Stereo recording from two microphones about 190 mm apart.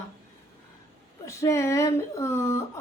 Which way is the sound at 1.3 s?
15° left (ahead or behind).